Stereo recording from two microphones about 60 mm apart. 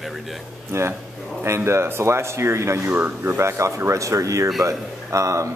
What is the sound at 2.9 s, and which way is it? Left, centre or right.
Speech, right.